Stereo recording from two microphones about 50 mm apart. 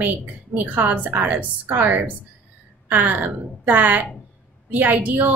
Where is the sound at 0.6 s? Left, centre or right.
Right.